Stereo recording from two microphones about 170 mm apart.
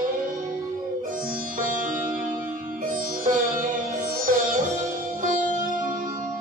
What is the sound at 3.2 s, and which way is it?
Sitar, 50° right (ahead or behind).